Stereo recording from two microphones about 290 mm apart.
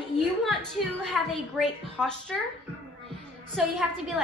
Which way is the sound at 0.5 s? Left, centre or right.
Centre.